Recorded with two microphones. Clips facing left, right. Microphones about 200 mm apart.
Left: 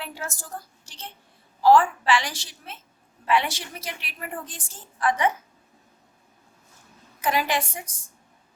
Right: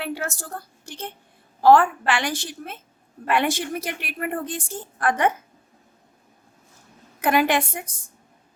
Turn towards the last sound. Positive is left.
turn(degrees=-55)  # may be behind; listen again after turning